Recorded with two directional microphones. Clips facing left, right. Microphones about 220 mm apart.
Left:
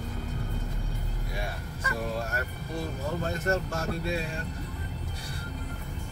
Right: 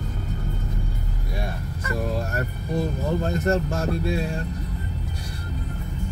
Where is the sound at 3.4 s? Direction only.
40° right (ahead or behind).